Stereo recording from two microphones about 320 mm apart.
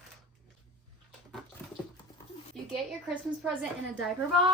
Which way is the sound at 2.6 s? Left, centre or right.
Centre.